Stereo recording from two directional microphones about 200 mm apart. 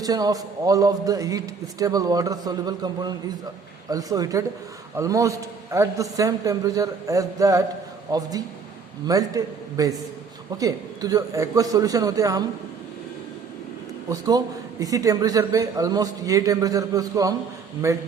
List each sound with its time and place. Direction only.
0.0 s a man's voice: 20° right (ahead or behind)
14.1 s a man's voice: 20° right (ahead or behind)